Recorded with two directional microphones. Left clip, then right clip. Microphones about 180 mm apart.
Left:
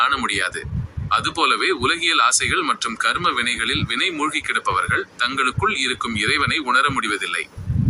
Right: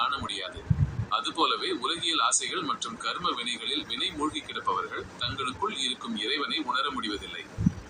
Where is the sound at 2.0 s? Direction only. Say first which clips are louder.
Left 9 dB; 60° left (ahead or behind).